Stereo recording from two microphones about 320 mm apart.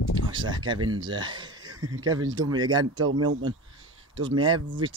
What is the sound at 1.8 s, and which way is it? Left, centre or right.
Speech, right.